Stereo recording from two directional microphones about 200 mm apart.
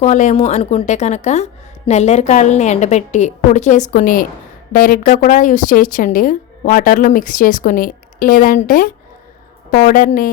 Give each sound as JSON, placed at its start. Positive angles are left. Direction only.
{"t": 0.0, "sound": "a woman's voice", "side_deg": 35}